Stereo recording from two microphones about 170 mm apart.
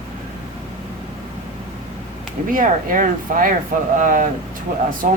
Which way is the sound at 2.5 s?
50° right (ahead or behind).